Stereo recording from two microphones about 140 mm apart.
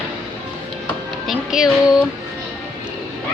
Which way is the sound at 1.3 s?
5° right (ahead or behind).